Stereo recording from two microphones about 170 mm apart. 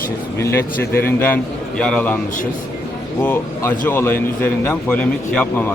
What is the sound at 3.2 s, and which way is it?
A man's voice, 10° left (ahead or behind).